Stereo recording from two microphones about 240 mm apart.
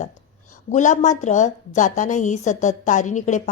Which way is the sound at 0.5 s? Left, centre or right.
Left.